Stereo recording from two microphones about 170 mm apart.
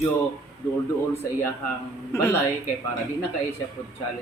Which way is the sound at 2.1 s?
15° left (ahead or behind).